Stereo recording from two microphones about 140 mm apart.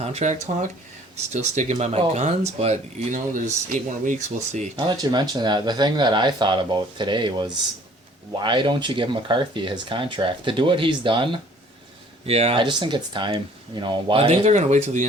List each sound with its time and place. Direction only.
0.0 s speech: 50° right (ahead or behind)
3.3 s speech: 65° right (ahead or behind)
4.8 s speech: 30° right (ahead or behind)
12.2 s speech: 45° right (ahead or behind)
12.6 s speech: 35° right (ahead or behind); by 15.0 s 60° right (ahead or behind)